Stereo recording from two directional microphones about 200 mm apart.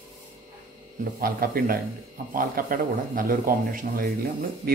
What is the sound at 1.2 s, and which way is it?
A man's voice, 45° right (ahead or behind).